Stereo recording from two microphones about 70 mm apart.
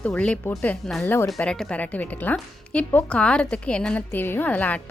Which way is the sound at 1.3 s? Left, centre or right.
Centre.